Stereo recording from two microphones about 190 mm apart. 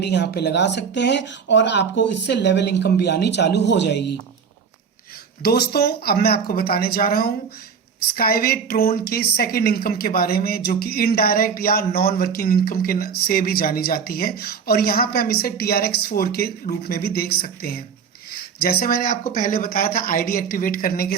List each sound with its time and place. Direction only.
0.0 s speech: 60° left (ahead or behind)
5.4 s a woman's voice: 55° left (ahead or behind)